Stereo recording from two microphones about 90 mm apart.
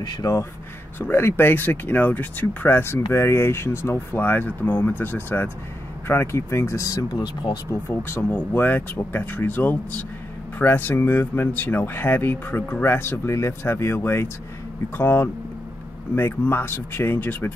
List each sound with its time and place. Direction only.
0.0 s speech: 40° left (ahead or behind)
0.9 s speech: 25° left (ahead or behind); by 7.5 s 50° left (ahead or behind)
7.7 s speech: 25° left (ahead or behind)